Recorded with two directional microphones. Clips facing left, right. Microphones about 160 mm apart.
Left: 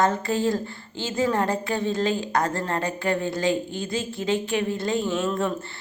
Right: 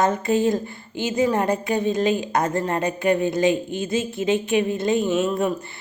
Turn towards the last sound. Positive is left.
turn(degrees=-15)  # may be behind; listen again after turning